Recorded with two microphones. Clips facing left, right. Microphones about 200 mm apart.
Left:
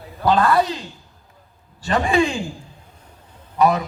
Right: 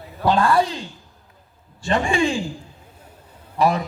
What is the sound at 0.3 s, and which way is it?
Speech, 30° right (ahead or behind).